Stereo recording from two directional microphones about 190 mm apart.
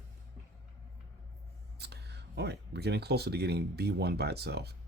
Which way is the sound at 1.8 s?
60° right (ahead or behind).